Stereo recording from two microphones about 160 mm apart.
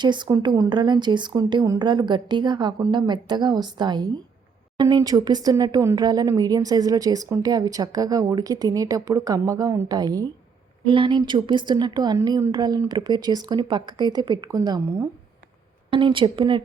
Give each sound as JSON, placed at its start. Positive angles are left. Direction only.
{"t": 0.0, "sound": "speech", "side_deg": -30}
{"t": 15.9, "sound": "a woman's voice", "side_deg": -30}